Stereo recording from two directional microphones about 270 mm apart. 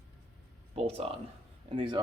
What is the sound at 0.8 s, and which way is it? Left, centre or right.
Speech, right.